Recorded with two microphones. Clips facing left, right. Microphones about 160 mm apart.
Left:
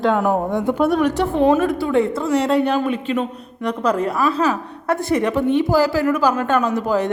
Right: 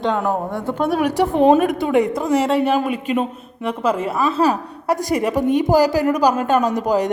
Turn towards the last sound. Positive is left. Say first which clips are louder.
# right 1 dB
turn(degrees=-15)  # may be behind; listen again after turning